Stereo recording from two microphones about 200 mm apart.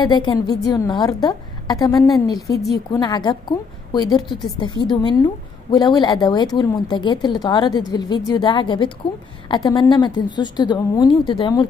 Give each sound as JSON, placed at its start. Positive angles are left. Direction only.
{"t": 0.0, "sound": "a woman's voice", "side_deg": 20}